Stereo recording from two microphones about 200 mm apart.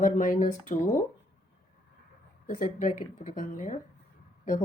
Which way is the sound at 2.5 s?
40° left (ahead or behind).